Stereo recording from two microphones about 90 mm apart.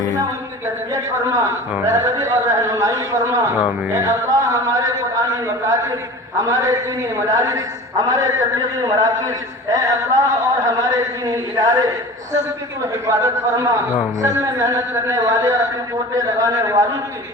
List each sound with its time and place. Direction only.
0.9 s a man's voice: 35° right (ahead or behind)